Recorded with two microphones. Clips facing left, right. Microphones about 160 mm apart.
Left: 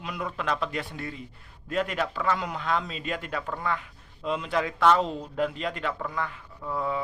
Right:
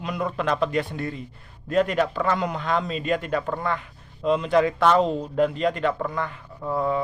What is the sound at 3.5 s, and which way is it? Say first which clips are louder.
A man's voice: right 4 dB; 5° left (ahead or behind).